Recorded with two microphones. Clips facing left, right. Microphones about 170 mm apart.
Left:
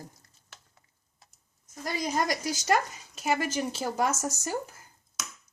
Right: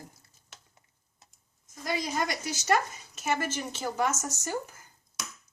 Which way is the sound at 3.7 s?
35° left (ahead or behind).